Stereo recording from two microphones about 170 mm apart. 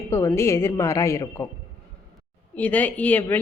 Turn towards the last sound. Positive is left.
turn(degrees=10)  # may be behind; listen again after turning